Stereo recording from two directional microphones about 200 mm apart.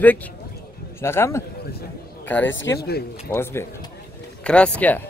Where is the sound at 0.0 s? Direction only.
10° left (ahead or behind).